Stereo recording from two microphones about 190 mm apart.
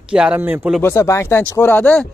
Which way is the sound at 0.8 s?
15° left (ahead or behind).